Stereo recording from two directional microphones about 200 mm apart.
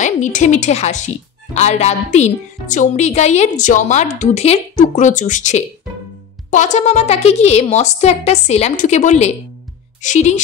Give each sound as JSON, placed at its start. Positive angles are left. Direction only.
{"t": 0.0, "sound": "speech", "side_deg": 40}